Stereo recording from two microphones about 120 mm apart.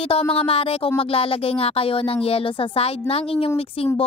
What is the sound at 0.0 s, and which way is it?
A child's voice, 55° left (ahead or behind).